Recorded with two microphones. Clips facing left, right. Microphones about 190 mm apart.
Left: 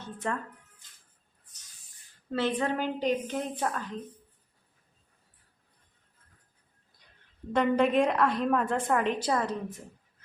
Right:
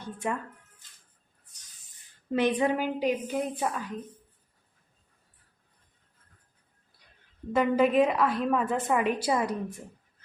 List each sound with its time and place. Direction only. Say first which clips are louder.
0.0 s a woman's voice: right 2 dB; 10° right (ahead or behind)
2.3 s a woman's voice: right 3 dB; 15° right (ahead or behind)
7.5 s a woman's voice: right 1 dB; 5° right (ahead or behind)